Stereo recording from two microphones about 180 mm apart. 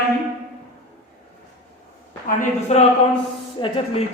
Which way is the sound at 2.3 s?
35° left (ahead or behind).